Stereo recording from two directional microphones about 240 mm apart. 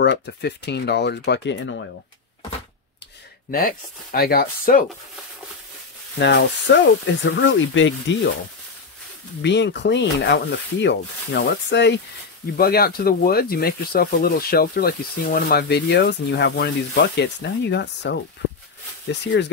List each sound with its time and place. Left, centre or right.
0.0 s rub: left
3.5 s speech: left
6.1 s rub: left
9.4 s rub: left
12.5 s speech: left